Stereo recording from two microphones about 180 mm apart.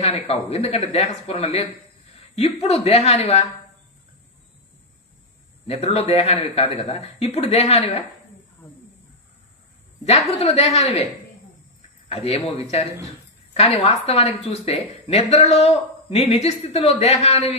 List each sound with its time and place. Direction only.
0.0 s speech: 35° left (ahead or behind)
5.7 s speech: 35° left (ahead or behind)
10.0 s speech: 35° left (ahead or behind)
12.1 s speech: 35° left (ahead or behind)